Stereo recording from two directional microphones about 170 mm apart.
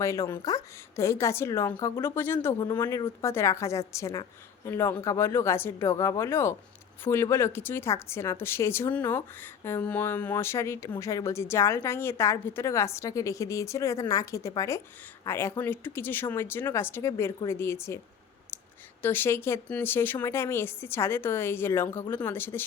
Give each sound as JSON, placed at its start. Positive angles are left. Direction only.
{"t": 0.0, "sound": "a woman's voice", "side_deg": 20}
{"t": 19.0, "sound": "a woman's voice", "side_deg": 10}